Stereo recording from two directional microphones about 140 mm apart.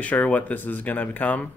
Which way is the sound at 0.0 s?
10° left (ahead or behind).